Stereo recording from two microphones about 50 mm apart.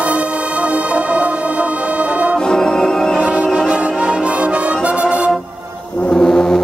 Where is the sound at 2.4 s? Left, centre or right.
Centre.